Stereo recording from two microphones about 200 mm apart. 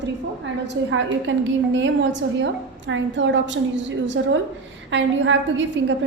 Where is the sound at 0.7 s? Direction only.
70° right (ahead or behind).